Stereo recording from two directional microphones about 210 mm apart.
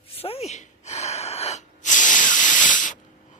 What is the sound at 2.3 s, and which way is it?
Hiss, 35° left (ahead or behind).